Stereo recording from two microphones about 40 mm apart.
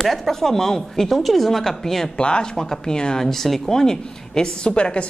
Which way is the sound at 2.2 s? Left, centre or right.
Left.